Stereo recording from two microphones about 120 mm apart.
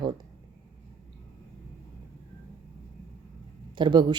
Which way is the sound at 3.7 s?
40° right (ahead or behind).